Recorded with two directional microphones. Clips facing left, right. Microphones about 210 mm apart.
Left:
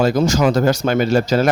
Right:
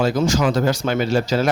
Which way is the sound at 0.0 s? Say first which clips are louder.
Left 3 dB; 40° left (ahead or behind).